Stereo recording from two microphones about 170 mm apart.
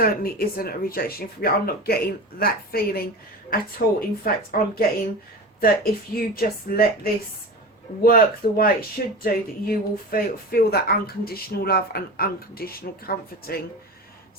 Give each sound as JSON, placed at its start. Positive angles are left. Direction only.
{"t": 0.0, "sound": "speech", "side_deg": 60}
{"t": 4.2, "sound": "speech", "side_deg": 60}